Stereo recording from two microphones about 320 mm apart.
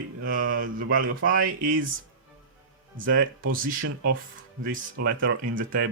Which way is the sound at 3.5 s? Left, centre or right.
Right.